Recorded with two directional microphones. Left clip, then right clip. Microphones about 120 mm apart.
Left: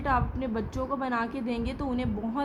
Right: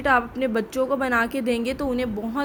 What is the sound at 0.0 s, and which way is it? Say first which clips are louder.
A woman's voice: right 8 dB; 45° right (ahead or behind).